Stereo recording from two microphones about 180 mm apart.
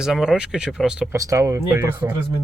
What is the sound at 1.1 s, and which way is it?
Speech, 15° right (ahead or behind).